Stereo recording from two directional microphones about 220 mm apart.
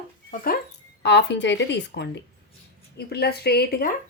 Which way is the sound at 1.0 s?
50° left (ahead or behind).